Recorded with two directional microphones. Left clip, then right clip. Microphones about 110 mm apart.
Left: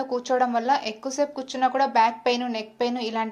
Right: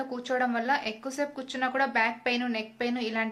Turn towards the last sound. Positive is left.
turn(degrees=25)  # may be behind; listen again after turning